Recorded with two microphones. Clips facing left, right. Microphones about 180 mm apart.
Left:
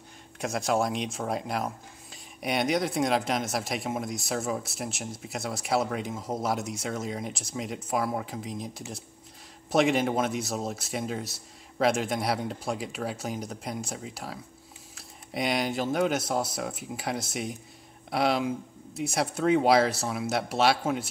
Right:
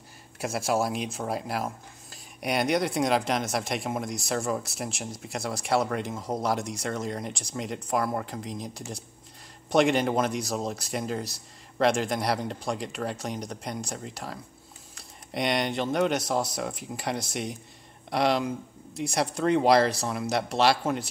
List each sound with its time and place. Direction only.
0.4 s speech: 5° right (ahead or behind)